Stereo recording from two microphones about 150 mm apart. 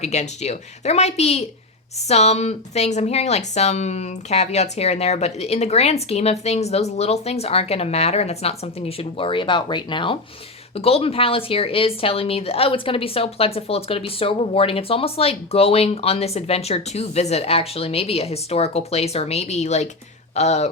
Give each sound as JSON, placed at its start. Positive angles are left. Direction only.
{"t": 0.0, "sound": "speech", "side_deg": 45}